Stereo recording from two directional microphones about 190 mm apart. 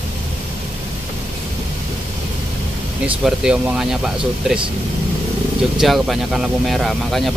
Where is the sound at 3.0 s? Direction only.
5° right (ahead or behind).